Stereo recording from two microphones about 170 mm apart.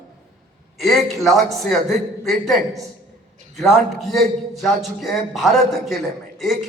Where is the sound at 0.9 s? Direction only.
Centre (ahead or behind).